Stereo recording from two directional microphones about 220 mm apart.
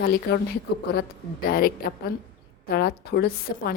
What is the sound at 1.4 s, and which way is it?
A woman's voice, 40° left (ahead or behind).